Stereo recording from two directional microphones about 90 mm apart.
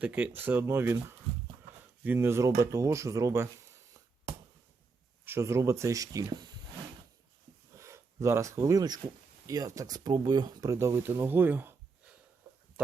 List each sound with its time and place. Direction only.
0.0 s speech: 20° right (ahead or behind)
2.0 s speech: 30° right (ahead or behind)
5.2 s speech: 30° right (ahead or behind); by 6.5 s 45° right (ahead or behind)
7.8 s a sound: 35° right (ahead or behind)
9.5 s speech: 40° right (ahead or behind)
10.7 s speech: 35° right (ahead or behind)